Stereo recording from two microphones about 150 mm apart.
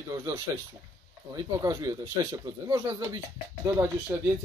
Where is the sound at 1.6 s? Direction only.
25° right (ahead or behind).